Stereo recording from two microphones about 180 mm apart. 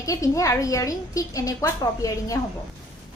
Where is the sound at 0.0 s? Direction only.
20° left (ahead or behind).